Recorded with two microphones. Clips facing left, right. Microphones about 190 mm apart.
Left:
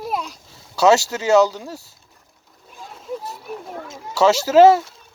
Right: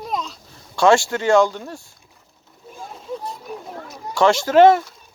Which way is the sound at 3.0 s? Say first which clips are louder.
Left 1 dB; 5° left (ahead or behind).